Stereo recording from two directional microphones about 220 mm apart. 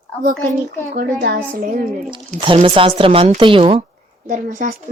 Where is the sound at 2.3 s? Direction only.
25° right (ahead or behind).